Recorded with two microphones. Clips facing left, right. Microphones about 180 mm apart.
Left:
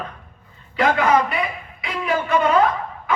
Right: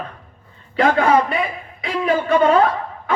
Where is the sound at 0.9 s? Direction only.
30° right (ahead or behind).